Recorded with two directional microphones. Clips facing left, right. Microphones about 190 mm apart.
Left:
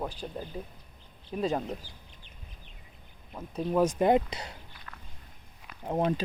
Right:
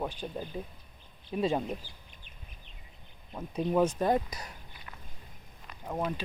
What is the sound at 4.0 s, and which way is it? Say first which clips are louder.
Speech: left 4 dB; 20° left (ahead or behind).